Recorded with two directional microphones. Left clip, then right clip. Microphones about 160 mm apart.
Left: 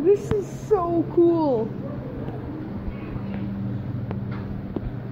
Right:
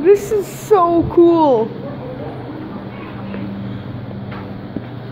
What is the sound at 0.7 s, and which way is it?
Speech, 20° right (ahead or behind).